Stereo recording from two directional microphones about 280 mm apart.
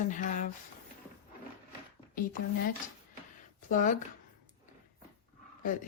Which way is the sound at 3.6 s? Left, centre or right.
Left.